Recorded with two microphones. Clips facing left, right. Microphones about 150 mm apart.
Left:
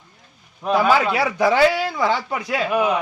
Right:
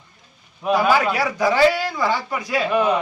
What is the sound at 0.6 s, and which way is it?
Speech, 5° right (ahead or behind).